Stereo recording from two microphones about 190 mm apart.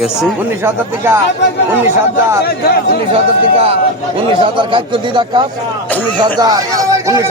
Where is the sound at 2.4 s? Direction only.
55° left (ahead or behind).